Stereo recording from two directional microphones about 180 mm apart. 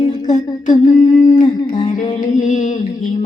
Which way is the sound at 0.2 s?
40° left (ahead or behind).